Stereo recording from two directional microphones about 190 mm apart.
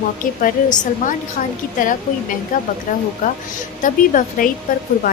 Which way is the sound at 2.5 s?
45° left (ahead or behind).